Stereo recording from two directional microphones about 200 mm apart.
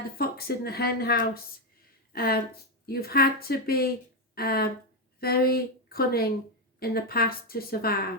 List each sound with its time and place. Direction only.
0.2 s speech: 50° left (ahead or behind)